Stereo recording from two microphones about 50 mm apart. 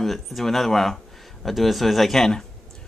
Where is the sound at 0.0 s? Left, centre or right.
Centre.